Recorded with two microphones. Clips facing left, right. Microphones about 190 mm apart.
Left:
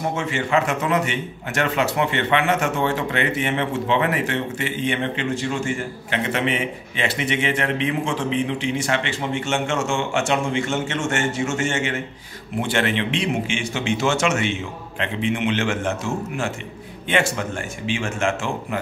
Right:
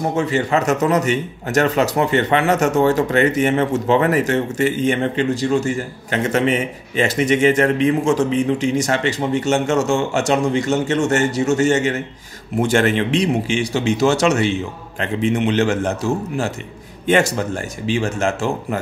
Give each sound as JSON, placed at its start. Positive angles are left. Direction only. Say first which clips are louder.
{"t": 0.1, "sound": "a man's voice", "louder": "right 3 dB", "side_deg": -35}